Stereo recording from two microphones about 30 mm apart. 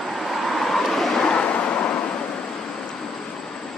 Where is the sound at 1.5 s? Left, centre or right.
Left.